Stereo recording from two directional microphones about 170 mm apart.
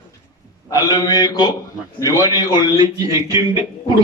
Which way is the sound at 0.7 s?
20° left (ahead or behind).